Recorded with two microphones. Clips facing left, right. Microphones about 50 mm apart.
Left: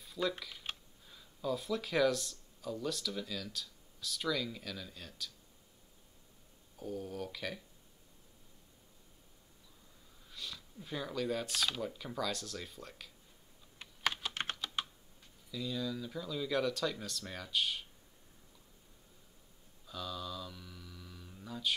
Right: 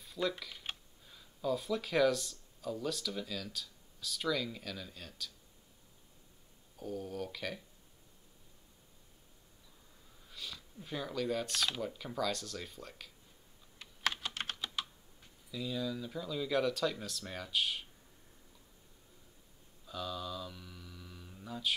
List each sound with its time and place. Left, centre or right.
0.0 s speech: centre
6.8 s speech: centre
10.3 s speech: centre
14.0 s computer keyboard: centre
14.3 s computer keyboard: left
15.5 s speech: centre
19.9 s speech: centre